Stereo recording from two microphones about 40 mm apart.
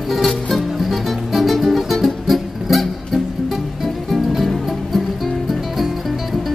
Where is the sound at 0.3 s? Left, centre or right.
Centre.